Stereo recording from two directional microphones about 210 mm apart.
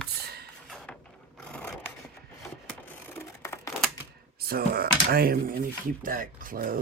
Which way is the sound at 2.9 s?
10° left (ahead or behind).